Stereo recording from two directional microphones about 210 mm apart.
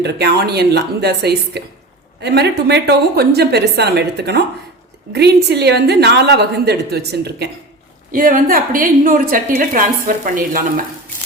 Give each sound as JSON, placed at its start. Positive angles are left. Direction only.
{"t": 0.0, "sound": "a woman's voice", "side_deg": -50}
{"t": 8.1, "sound": "a woman's voice", "side_deg": -40}